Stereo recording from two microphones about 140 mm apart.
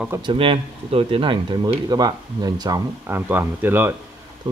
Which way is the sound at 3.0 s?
15° right (ahead or behind).